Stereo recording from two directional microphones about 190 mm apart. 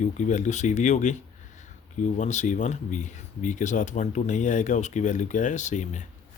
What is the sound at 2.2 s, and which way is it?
Speech, 40° left (ahead or behind).